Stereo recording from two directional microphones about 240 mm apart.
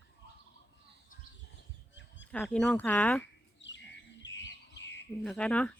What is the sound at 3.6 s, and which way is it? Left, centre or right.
Bird, left.